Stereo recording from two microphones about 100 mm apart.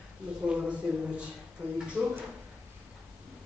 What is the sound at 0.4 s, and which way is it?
Speech, 10° right (ahead or behind).